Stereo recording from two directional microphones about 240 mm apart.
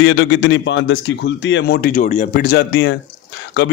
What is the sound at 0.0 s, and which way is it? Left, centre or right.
A man's voice, left.